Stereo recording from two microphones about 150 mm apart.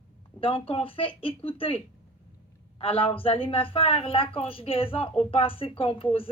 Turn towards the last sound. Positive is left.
turn(degrees=40)  # may be behind; listen again after turning